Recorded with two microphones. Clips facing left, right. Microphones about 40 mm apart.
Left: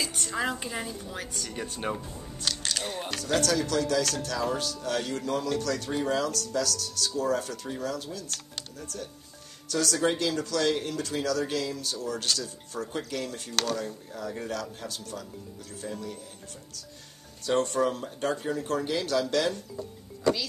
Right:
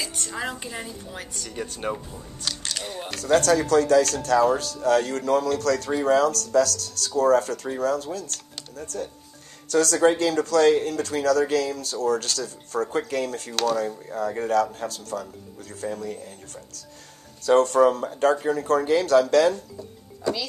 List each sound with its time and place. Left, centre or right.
0.0 s speech: centre
3.3 s speech: right
17.4 s speech: right